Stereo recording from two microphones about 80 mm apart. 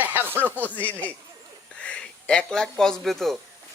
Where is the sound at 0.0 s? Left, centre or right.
Right.